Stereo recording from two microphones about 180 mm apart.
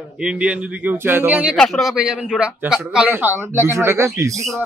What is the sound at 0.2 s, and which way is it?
A man's voice, 5° right (ahead or behind).